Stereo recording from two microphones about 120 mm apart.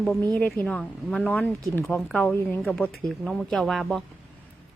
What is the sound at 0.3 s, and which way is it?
Speech, 5° left (ahead or behind).